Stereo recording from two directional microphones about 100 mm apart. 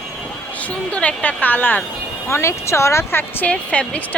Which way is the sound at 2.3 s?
30° left (ahead or behind).